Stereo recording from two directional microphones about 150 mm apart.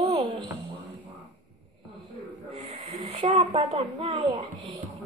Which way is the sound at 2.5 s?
35° right (ahead or behind).